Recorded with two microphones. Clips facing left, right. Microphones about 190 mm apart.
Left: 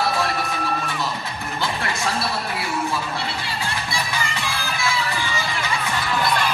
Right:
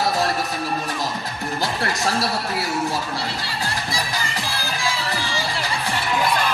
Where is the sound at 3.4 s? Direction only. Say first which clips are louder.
Right 1 dB; 35° right (ahead or behind).